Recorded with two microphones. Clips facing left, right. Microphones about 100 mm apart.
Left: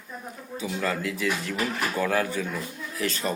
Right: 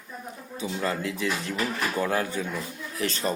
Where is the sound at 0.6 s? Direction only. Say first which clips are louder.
Even; 30° right (ahead or behind).